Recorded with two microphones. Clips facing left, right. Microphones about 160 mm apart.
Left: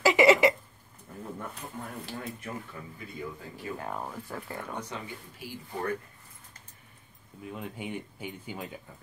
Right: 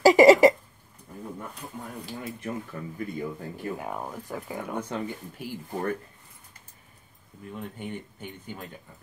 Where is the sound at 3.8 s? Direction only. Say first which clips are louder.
Right 2 dB; 10° right (ahead or behind).